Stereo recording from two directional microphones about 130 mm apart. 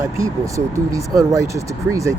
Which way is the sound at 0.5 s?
25° right (ahead or behind).